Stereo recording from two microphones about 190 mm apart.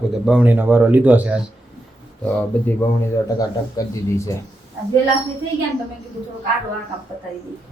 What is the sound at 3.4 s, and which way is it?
Speech, 15° left (ahead or behind).